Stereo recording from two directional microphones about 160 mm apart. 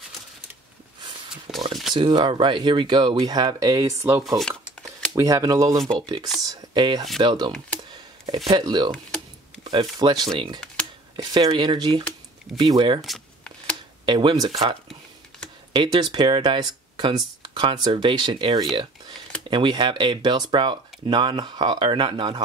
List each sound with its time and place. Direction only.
1.7 s a sound: centre (ahead or behind)
2.0 s speech: 30° right (ahead or behind)
6.4 s a sound: 25° right (ahead or behind)
7.2 s speech: 30° right (ahead or behind)
13.0 s shuffling cards: 5° left (ahead or behind)
14.0 s speech: 30° right (ahead or behind)